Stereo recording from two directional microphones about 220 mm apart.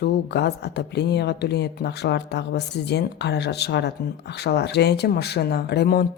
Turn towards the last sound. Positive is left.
turn(degrees=45)  # may be behind; listen again after turning